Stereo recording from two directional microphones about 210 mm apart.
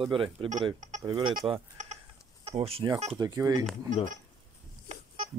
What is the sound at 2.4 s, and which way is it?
Speech, 30° right (ahead or behind).